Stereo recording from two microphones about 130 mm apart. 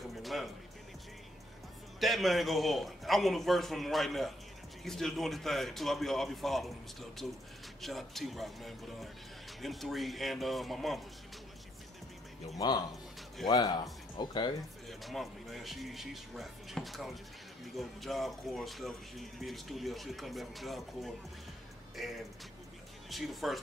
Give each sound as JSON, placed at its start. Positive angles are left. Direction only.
{"t": 0.1, "sound": "music", "side_deg": 0}
{"t": 2.0, "sound": "speech", "side_deg": 0}
{"t": 12.5, "sound": "speech", "side_deg": 30}
{"t": 14.9, "sound": "speech", "side_deg": 0}